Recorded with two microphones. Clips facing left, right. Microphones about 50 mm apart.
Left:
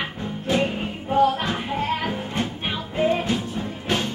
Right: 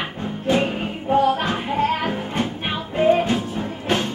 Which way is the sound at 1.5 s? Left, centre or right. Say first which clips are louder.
Right 4 dB; right.